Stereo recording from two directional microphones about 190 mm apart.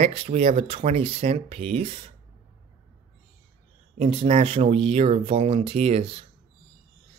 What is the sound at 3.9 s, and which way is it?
Speech, 35° right (ahead or behind).